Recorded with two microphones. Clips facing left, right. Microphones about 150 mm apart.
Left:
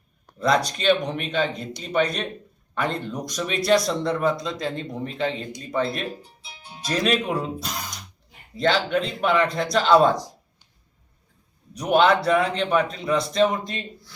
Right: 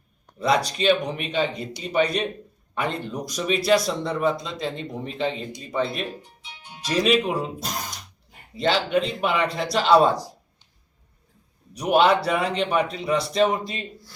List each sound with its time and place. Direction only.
0.3 s a man's voice: 5° right (ahead or behind)
6.2 s music: 30° left (ahead or behind)
7.0 s speech: 5° right (ahead or behind)
8.5 s a man's voice: 5° right (ahead or behind)
11.8 s a man's voice: 5° right (ahead or behind)